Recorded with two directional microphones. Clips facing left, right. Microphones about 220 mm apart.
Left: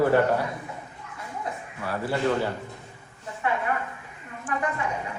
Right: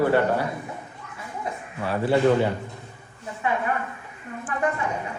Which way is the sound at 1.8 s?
25° right (ahead or behind).